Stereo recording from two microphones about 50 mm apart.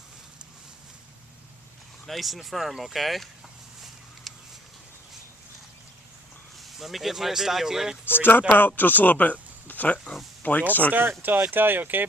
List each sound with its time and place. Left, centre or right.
2.0 s speech: centre
4.3 s a sound: centre
6.6 s speech: centre
8.0 s speech: left
11.2 s speech: right